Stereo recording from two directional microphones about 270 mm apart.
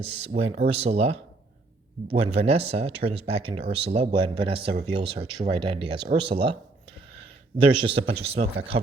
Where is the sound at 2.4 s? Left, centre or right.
Right.